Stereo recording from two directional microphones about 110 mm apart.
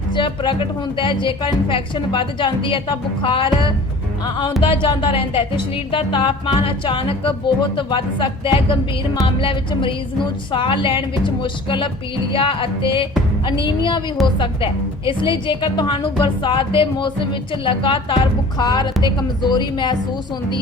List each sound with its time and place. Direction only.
0.1 s a woman's voice: 50° left (ahead or behind)